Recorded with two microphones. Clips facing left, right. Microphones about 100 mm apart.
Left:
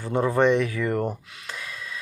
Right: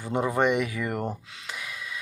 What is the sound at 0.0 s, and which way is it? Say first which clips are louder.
Speech: left 3 dB; 15° right (ahead or behind).